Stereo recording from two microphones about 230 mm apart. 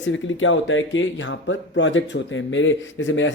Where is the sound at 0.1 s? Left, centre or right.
Left.